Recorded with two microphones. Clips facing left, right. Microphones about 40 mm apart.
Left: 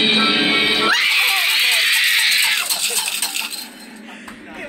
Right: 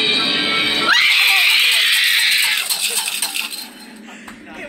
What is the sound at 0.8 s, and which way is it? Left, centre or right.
Music, right.